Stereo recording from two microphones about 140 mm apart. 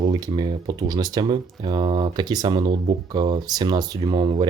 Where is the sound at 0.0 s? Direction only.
30° right (ahead or behind).